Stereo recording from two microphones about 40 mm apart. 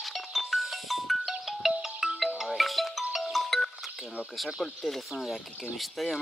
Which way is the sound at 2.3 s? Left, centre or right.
Centre.